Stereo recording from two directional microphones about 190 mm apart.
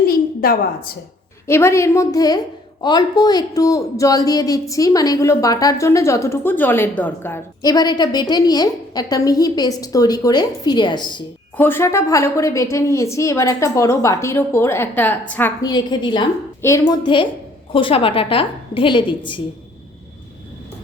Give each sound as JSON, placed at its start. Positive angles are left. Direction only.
{"t": 0.4, "sound": "a woman's voice", "side_deg": 50}
{"t": 1.5, "sound": "a woman's voice", "side_deg": 15}
{"t": 11.5, "sound": "a woman's voice", "side_deg": 10}